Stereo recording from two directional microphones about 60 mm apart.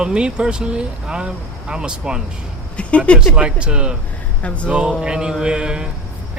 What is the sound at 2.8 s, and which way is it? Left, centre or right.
Speech, left.